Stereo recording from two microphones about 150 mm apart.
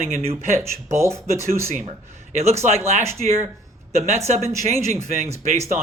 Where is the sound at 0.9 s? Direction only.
20° right (ahead or behind).